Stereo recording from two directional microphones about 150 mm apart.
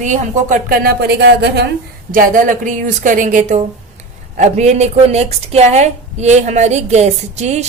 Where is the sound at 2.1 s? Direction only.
65° right (ahead or behind).